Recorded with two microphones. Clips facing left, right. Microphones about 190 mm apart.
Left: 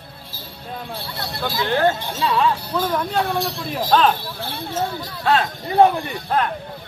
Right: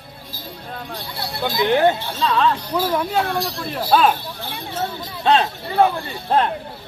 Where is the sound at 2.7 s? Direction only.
10° right (ahead or behind).